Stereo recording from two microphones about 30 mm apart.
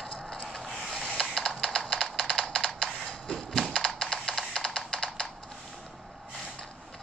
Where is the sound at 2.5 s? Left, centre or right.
Centre.